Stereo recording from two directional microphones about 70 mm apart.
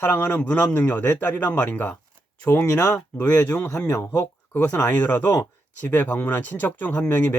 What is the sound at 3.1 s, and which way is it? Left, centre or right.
Speech, left.